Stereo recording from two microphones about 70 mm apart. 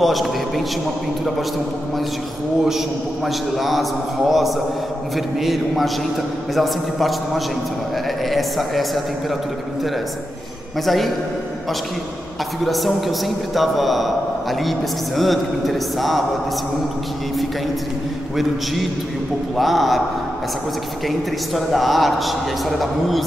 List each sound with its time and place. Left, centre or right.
0.0 s a man's voice: centre
3.3 s a man's voice: centre
12.6 s a man's voice: centre
18.3 s a man's voice: centre
21.5 s a man's voice: centre